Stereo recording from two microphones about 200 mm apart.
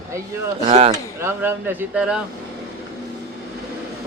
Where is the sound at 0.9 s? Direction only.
10° right (ahead or behind).